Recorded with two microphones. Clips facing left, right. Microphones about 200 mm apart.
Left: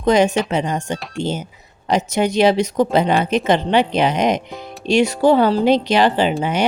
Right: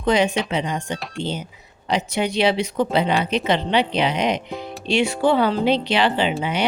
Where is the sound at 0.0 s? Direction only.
45° left (ahead or behind).